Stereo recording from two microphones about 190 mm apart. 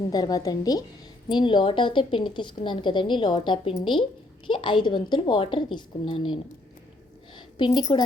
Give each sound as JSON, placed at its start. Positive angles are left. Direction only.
{"t": 0.1, "sound": "a woman's voice", "side_deg": 20}